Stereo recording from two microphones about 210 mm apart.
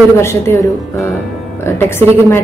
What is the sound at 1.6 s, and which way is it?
Speech, 10° left (ahead or behind).